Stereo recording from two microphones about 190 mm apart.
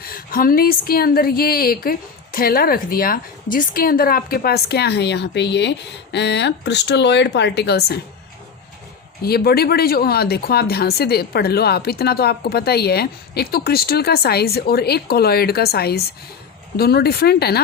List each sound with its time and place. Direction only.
0.0 s a woman's voice: 50° left (ahead or behind)
9.2 s a woman's voice: 55° left (ahead or behind)